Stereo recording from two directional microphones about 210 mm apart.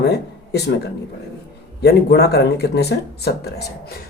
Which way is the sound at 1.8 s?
50° left (ahead or behind).